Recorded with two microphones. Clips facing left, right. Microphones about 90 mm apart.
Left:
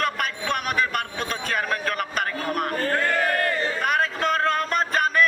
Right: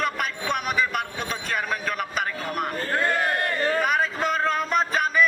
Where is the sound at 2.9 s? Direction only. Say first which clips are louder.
Right 1 dB; 20° right (ahead or behind).